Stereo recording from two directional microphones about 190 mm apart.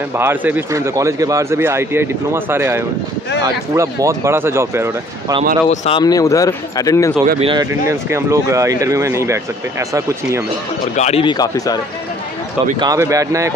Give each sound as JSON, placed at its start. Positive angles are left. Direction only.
{"t": 0.1, "sound": "speech", "side_deg": -10}
{"t": 5.7, "sound": "speech", "side_deg": 30}
{"t": 7.3, "sound": "speech", "side_deg": -30}
{"t": 7.8, "sound": "speech", "side_deg": -15}
{"t": 11.0, "sound": "speech", "side_deg": 30}
{"t": 12.7, "sound": "speech", "side_deg": -20}